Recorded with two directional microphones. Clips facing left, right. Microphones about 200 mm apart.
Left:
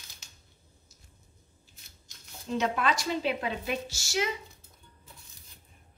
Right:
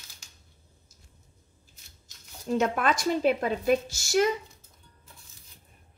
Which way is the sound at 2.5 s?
50° right (ahead or behind).